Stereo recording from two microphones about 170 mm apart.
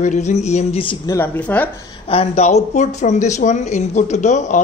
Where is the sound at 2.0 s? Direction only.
35° left (ahead or behind).